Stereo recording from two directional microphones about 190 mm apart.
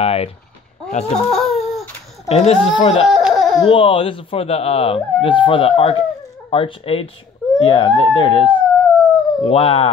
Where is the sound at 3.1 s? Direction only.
Centre (ahead or behind).